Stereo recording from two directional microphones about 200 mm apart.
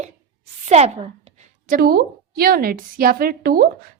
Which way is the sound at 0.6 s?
35° right (ahead or behind).